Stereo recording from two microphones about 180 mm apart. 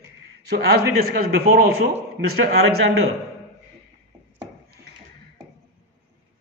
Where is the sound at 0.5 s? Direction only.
60° right (ahead or behind).